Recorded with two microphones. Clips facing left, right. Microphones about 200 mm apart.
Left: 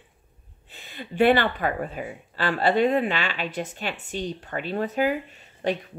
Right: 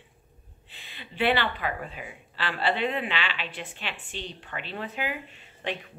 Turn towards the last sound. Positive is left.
turn(degrees=45)  # may be behind; listen again after turning